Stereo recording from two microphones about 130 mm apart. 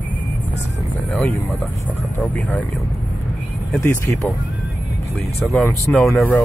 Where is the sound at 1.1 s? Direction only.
10° left (ahead or behind).